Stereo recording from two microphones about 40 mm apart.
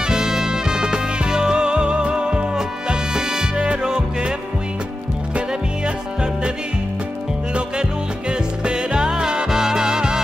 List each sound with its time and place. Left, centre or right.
0.0 s music: centre
2.5 s music: centre
8.3 s music: right